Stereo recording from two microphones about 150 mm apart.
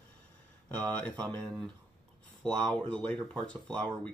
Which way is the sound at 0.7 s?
10° left (ahead or behind).